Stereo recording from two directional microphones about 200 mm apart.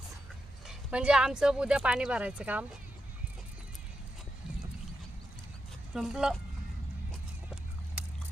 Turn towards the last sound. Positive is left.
turn(degrees=0)  # may be behind; listen again after turning